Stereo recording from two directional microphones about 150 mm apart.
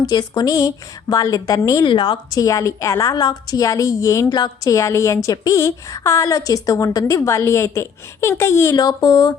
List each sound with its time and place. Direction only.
0.0 s a woman's voice: 25° left (ahead or behind)